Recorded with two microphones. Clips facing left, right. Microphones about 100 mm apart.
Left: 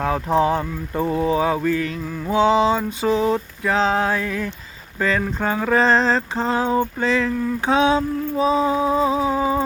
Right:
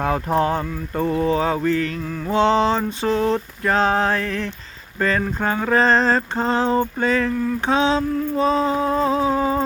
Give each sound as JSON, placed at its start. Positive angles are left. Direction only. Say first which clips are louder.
{"t": 0.0, "sound": "speech", "louder": "left 1 dB", "side_deg": 0}
{"t": 4.9, "sound": "mantra", "louder": "even", "side_deg": 0}
{"t": 6.6, "sound": "speech", "louder": "right 1 dB", "side_deg": 10}
{"t": 7.0, "sound": "mantra", "louder": "even", "side_deg": -5}
{"t": 7.6, "sound": "speech", "louder": "left 2 dB", "side_deg": 15}